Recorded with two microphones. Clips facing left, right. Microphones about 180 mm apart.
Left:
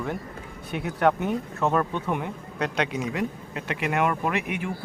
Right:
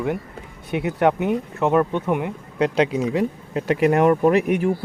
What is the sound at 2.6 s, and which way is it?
Speech, 30° right (ahead or behind).